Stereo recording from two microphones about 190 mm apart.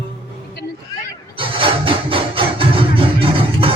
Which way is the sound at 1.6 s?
25° right (ahead or behind).